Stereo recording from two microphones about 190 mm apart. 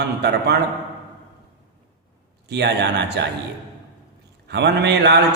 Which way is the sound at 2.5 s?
65° right (ahead or behind).